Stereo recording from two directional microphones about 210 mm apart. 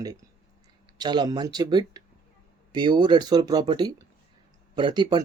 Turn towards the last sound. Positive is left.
turn(degrees=-20)  # may be behind; listen again after turning